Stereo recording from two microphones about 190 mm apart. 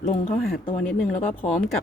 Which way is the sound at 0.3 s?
50° left (ahead or behind).